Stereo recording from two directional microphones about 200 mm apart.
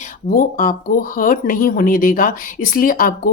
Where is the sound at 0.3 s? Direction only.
45° left (ahead or behind).